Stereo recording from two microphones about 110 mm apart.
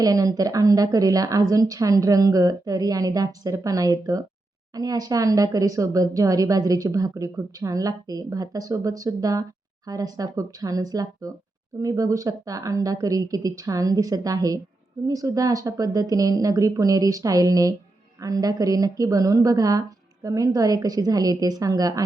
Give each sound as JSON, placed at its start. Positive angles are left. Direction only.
{"t": 0.0, "sound": "speech", "side_deg": -30}